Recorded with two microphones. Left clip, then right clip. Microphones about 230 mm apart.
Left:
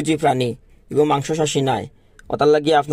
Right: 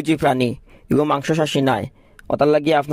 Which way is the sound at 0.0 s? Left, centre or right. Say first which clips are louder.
Even; right.